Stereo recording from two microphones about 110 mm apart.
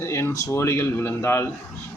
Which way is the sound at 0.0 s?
25° left (ahead or behind).